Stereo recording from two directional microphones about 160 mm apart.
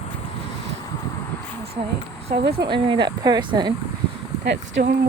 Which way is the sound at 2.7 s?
30° right (ahead or behind).